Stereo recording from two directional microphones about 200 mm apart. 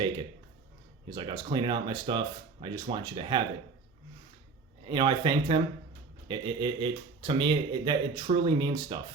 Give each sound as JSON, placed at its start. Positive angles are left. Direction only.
{"t": 1.1, "sound": "speech", "side_deg": -20}
{"t": 4.9, "sound": "speech", "side_deg": -25}